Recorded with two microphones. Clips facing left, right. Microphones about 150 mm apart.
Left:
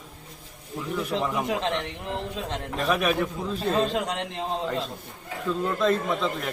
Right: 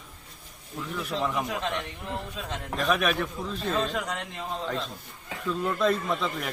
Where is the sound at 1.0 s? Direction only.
10° left (ahead or behind).